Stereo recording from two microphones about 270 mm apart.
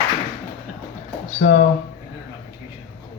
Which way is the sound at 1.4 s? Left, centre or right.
Left.